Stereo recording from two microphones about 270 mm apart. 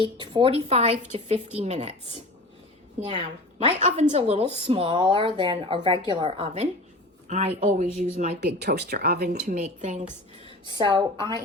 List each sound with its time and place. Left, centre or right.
0.2 s a woman's voice: centre
3.1 s a woman's voice: right
8.4 s a woman's voice: right; by 11.3 s centre